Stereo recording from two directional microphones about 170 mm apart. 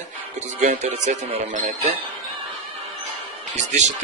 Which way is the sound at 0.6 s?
45° right (ahead or behind).